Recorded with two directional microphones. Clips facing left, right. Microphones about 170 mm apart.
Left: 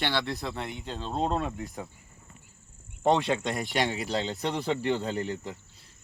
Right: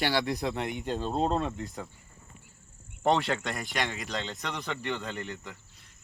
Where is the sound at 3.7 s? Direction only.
30° left (ahead or behind).